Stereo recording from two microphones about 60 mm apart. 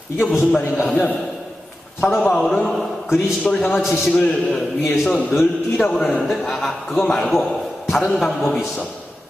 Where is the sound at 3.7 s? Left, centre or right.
Centre.